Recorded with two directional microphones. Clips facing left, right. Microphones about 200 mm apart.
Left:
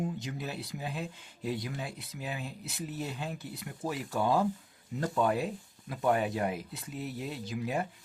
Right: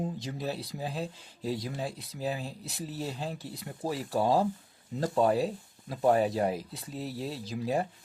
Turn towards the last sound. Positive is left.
turn(degrees=-35)  # may be behind; listen again after turning